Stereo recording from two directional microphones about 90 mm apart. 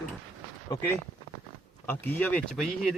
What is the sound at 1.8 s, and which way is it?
Speech, 20° left (ahead or behind).